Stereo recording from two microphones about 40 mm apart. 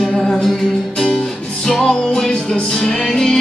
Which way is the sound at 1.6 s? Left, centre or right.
Centre.